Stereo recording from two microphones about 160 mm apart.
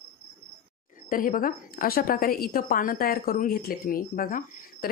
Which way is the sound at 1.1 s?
60° left (ahead or behind).